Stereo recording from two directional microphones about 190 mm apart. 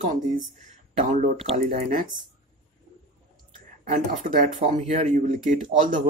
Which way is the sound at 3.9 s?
45° right (ahead or behind).